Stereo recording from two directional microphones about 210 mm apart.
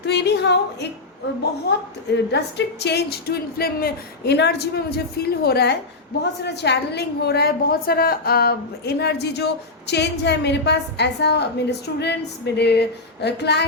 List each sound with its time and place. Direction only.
0.0 s a woman's voice: 55° left (ahead or behind)